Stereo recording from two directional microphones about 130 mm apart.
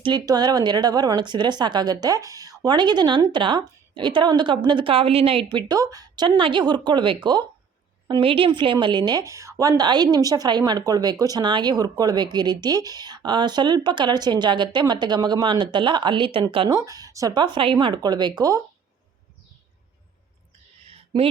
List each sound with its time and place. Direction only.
0.0 s a woman's voice: 35° right (ahead or behind)
16.7 s a woman's voice: 25° right (ahead or behind)